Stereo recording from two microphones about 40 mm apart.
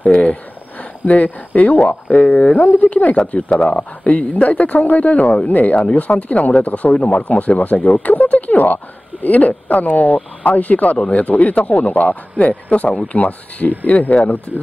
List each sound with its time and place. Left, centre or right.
1.0 s speech: left